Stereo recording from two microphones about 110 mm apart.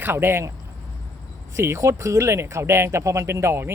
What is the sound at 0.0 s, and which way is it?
Speech, 20° right (ahead or behind).